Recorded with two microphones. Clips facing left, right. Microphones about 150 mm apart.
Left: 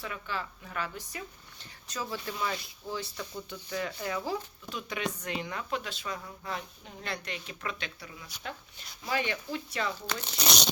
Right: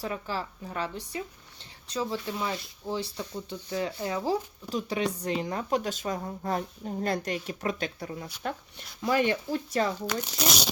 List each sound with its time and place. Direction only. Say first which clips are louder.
0.0 s speech: right 4 dB; 35° right (ahead or behind)
10.2 s speech: right 2 dB; centre (ahead or behind)